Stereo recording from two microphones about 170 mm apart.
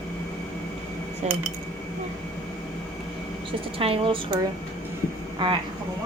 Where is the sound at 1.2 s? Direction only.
40° right (ahead or behind).